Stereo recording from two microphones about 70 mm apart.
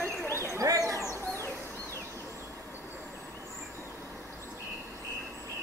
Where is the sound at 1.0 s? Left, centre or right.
Left.